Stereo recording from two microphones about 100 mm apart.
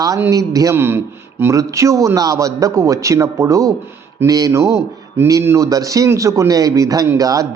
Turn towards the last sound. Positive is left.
turn(degrees=-35)  # may be behind; listen again after turning